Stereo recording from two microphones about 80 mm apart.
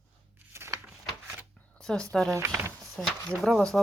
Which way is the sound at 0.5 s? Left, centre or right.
Right.